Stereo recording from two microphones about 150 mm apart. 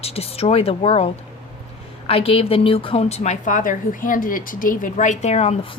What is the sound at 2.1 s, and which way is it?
A woman's voice, 40° left (ahead or behind).